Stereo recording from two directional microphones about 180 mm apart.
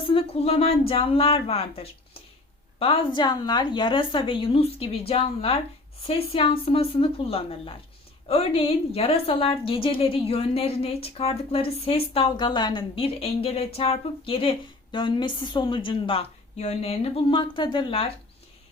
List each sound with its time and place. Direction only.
0.1 s a woman's voice: 30° left (ahead or behind)